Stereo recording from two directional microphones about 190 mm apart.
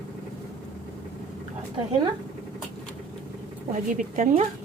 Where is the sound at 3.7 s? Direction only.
40° right (ahead or behind).